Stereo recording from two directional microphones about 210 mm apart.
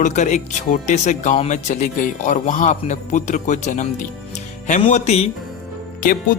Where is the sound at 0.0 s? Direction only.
35° left (ahead or behind).